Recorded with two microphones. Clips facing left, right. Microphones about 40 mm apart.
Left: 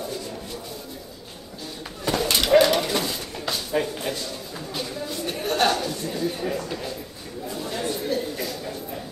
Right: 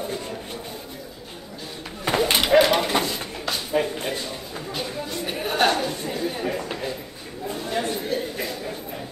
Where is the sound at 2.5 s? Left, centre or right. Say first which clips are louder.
Left 1 dB; centre.